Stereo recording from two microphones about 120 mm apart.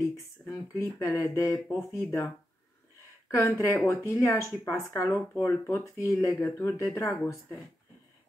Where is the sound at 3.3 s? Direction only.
20° left (ahead or behind).